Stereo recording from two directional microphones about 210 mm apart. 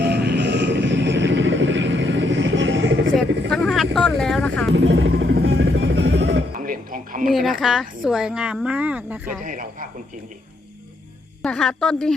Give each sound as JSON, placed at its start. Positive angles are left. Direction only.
{"t": 0.0, "sound": "vehicle", "side_deg": -50}
{"t": 3.5, "sound": "vehicle", "side_deg": 0}
{"t": 4.7, "sound": "music", "side_deg": -60}
{"t": 6.6, "sound": "music", "side_deg": -40}
{"t": 7.3, "sound": "a woman's voice", "side_deg": 0}
{"t": 9.4, "sound": "speech", "side_deg": -40}
{"t": 11.4, "sound": "a woman's voice", "side_deg": 5}